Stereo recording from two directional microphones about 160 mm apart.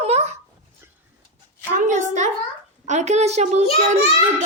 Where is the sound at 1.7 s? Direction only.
50° right (ahead or behind).